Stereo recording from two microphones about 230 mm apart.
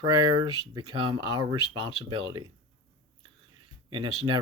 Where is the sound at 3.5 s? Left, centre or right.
Centre.